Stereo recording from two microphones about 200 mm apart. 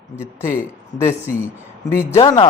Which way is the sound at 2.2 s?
20° left (ahead or behind).